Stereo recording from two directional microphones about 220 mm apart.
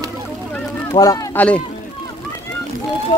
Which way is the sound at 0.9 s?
15° left (ahead or behind).